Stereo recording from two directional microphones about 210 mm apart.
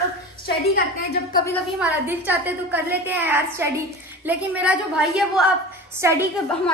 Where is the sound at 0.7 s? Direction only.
45° left (ahead or behind).